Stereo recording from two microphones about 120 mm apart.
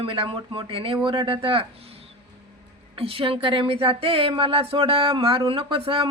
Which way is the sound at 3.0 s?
50° right (ahead or behind).